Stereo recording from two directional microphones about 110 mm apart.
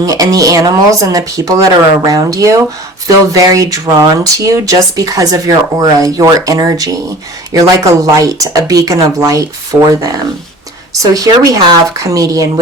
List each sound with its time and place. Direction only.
0.0 s speech: 30° right (ahead or behind)
9.7 s speech: 45° right (ahead or behind)
11.0 s speech: 35° right (ahead or behind)